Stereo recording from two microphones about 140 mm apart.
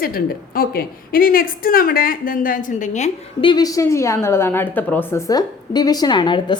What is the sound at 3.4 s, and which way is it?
A woman's voice, 30° left (ahead or behind).